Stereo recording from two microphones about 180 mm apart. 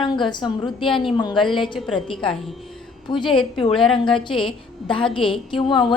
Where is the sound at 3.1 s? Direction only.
25° left (ahead or behind).